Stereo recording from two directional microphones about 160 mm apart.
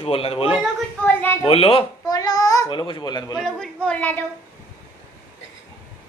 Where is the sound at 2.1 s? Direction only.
20° left (ahead or behind).